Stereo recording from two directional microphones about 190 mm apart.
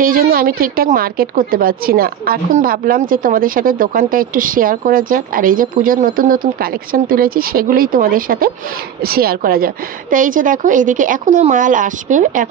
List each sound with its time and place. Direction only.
0.0 s a woman's voice: 50° right (ahead or behind)